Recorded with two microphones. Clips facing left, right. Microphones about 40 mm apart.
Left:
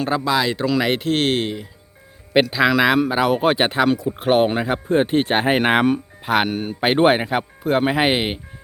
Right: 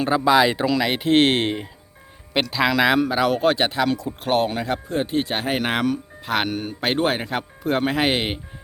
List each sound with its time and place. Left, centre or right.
0.0 s speech: centre
0.7 s speech: centre
1.0 s speech: right
2.3 s a man's voice: centre
4.9 s speech: left
6.2 s a man's voice: centre
7.3 s a man's voice: centre